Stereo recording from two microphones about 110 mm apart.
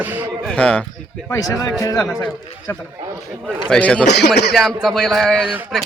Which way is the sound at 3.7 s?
10° left (ahead or behind).